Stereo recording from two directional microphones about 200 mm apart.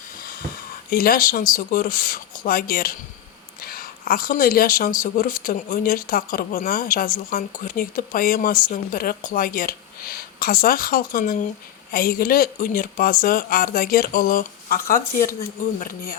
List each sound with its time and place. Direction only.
0.9 s speech: 45° left (ahead or behind)